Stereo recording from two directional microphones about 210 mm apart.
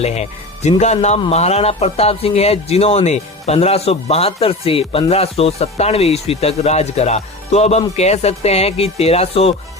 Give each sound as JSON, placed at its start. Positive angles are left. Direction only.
{"t": 0.0, "sound": "speech", "side_deg": 30}